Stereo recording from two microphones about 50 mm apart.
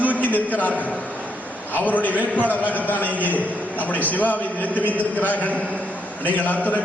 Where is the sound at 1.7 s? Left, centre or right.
Left.